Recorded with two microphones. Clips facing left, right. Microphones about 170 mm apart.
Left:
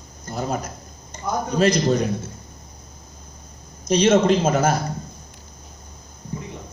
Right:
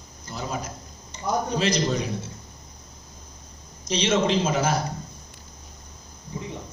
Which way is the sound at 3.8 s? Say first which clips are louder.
Left 6 dB; 50° left (ahead or behind).